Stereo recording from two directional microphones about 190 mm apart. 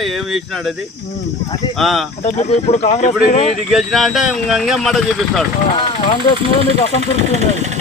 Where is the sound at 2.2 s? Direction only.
35° left (ahead or behind).